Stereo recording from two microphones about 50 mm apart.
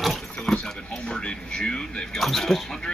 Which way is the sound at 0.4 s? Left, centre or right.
Centre.